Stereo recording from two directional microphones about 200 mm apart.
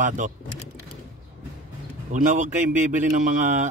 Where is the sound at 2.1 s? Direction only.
40° right (ahead or behind).